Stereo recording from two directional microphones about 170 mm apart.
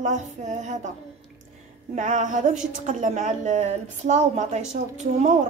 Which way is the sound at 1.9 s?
45° right (ahead or behind).